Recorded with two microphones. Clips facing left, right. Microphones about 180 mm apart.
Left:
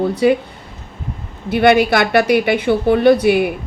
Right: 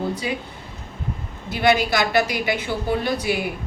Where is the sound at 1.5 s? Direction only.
60° left (ahead or behind).